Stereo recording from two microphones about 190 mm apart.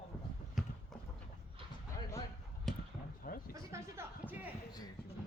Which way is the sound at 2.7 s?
Centre (ahead or behind).